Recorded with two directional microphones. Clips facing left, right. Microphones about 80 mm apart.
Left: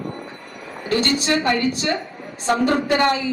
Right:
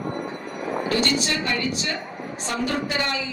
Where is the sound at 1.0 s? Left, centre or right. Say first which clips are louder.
Left 4 dB; left.